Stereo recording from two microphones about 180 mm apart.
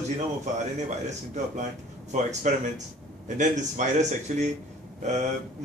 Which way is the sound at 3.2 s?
45° right (ahead or behind).